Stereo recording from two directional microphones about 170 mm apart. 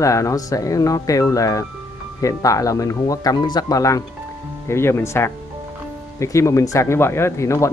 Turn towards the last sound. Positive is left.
turn(degrees=15)  # may be behind; listen again after turning